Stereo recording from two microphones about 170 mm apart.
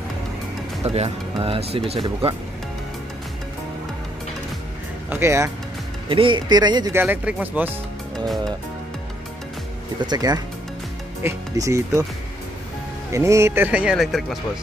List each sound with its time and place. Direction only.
0.8 s speech: 35° right (ahead or behind)
5.1 s speech: 15° right (ahead or behind)
6.0 s speech: 30° right (ahead or behind); by 7.7 s 10° right (ahead or behind)
10.0 s speech: 25° right (ahead or behind)
13.1 s speech: 15° right (ahead or behind)